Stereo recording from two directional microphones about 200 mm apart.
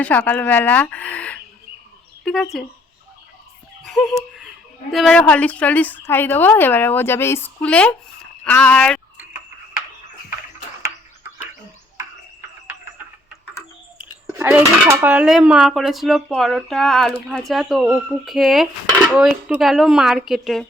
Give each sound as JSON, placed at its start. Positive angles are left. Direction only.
{"t": 0.0, "sound": "a woman's voice", "side_deg": 5}
{"t": 2.2, "sound": "dishes", "side_deg": 5}
{"t": 3.8, "sound": "a woman's voice", "side_deg": 0}
{"t": 14.3, "sound": "dishes", "side_deg": -5}